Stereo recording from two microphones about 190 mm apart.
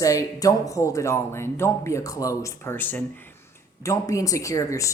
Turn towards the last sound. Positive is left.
turn(degrees=15)  # may be behind; listen again after turning